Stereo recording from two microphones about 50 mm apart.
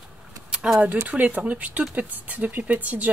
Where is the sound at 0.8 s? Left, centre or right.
Right.